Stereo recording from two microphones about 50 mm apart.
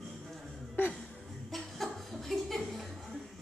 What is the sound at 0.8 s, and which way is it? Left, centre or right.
Music, left.